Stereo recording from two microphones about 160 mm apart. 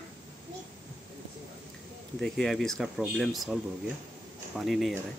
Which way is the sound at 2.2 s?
Centre (ahead or behind).